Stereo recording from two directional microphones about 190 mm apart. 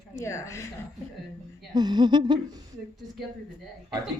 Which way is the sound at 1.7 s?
25° right (ahead or behind).